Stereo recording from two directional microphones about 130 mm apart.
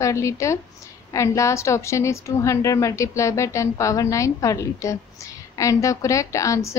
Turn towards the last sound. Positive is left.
turn(degrees=25)  # may be behind; listen again after turning